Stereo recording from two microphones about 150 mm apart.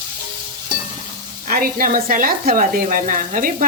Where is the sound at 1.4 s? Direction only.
70° right (ahead or behind).